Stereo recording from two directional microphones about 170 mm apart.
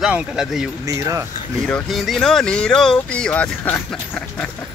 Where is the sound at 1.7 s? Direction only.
Centre (ahead or behind).